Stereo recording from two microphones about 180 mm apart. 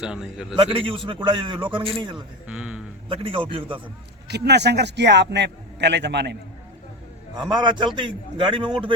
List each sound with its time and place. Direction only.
0.0 s a man's voice: 5° right (ahead or behind)
0.5 s a man's voice: 30° right (ahead or behind)
2.5 s a sound: 5° right (ahead or behind)
3.1 s a man's voice: 30° right (ahead or behind)
4.3 s a man's voice: 70° right (ahead or behind)
7.5 s a man's voice: 25° right (ahead or behind)